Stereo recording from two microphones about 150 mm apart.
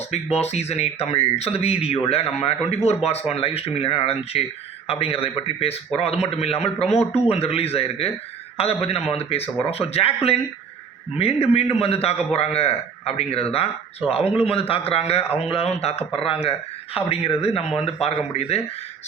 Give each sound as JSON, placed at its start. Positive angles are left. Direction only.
{"t": 0.1, "sound": "a man's voice", "side_deg": 45}
{"t": 17.6, "sound": "speech", "side_deg": 0}
{"t": 17.8, "sound": "speech", "side_deg": 45}